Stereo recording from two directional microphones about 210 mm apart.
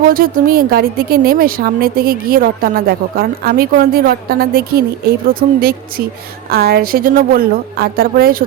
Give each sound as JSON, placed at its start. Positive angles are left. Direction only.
{"t": 0.0, "sound": "speech", "side_deg": -45}